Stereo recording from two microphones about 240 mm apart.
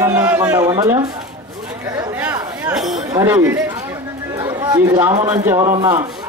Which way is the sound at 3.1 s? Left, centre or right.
Centre.